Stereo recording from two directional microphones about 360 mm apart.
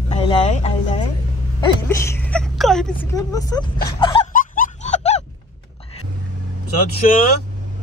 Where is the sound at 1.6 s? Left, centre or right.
Centre.